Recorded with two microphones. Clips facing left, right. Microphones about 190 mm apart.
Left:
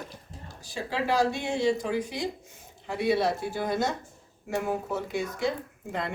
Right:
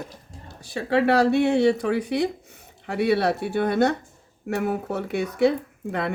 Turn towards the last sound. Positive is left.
turn(degrees=-65)  # may be behind; listen again after turning